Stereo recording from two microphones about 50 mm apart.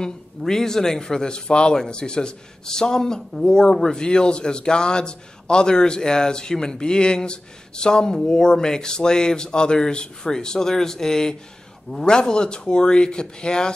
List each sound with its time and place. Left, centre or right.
0.4 s a man's voice: centre